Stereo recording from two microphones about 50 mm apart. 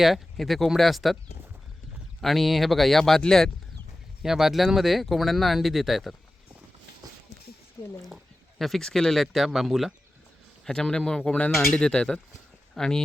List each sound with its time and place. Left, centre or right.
0.0 s speech: centre
2.2 s a man's voice: centre
4.2 s speech: centre
8.0 s speech: centre
10.7 s a man's voice: centre